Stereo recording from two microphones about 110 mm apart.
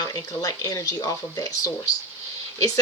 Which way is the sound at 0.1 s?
35° left (ahead or behind).